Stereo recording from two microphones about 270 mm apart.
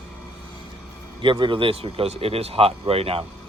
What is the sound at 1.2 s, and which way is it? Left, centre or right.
A man's voice, centre.